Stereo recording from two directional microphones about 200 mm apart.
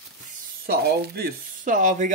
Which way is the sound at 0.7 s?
50° right (ahead or behind).